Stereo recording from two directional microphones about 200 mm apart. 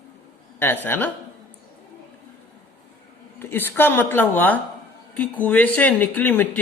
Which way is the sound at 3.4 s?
10° left (ahead or behind).